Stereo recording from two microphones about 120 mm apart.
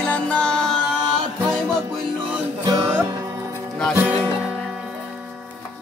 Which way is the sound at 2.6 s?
30° right (ahead or behind).